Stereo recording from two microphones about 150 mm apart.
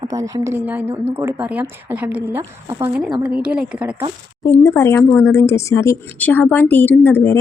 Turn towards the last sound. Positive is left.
turn(degrees=15)  # may be behind; listen again after turning